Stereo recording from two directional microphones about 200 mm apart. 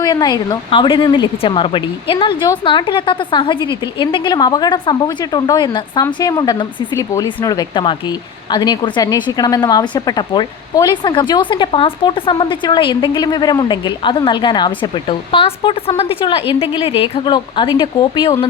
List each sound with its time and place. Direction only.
0.0 s a woman's voice: 20° left (ahead or behind)